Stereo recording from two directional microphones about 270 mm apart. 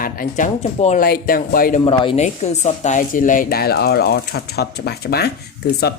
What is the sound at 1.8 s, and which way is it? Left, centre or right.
Speech, left.